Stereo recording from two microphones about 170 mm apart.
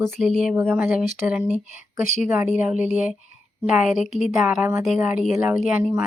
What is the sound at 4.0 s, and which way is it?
Speech, 45° left (ahead or behind).